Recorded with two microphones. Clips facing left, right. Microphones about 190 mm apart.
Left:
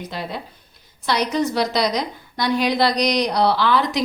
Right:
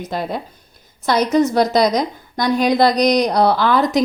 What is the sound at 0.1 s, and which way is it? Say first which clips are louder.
A woman's voice: right 6 dB; 50° right (ahead or behind).